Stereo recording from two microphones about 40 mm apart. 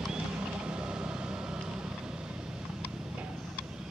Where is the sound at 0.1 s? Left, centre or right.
Right.